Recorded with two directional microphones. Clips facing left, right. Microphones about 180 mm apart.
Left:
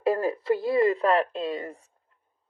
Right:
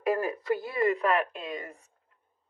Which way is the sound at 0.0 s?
30° left (ahead or behind).